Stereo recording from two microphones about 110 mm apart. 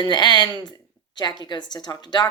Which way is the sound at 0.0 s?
40° left (ahead or behind).